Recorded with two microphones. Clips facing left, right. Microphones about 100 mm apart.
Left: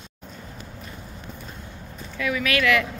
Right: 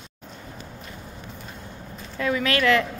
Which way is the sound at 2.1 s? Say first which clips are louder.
Right 1 dB; 30° right (ahead or behind).